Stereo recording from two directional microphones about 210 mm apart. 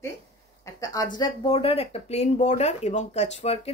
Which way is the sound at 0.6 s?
15° left (ahead or behind).